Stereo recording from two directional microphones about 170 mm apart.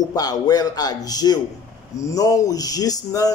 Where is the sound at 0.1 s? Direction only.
20° left (ahead or behind).